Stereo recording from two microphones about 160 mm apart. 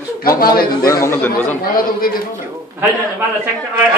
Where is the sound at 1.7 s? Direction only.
65° left (ahead or behind).